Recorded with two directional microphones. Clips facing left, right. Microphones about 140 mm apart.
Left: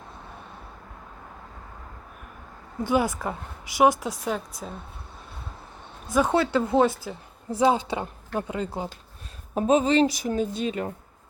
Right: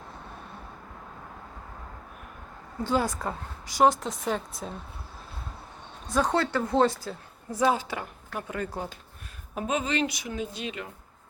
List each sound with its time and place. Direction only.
2.8 s speech: 15° left (ahead or behind)
6.1 s speech: 10° left (ahead or behind)
6.8 s speech: centre (ahead or behind)
7.1 s a woman's voice: 15° left (ahead or behind)
7.7 s speech: 25° left (ahead or behind)
9.6 s a woman's voice: 35° left (ahead or behind)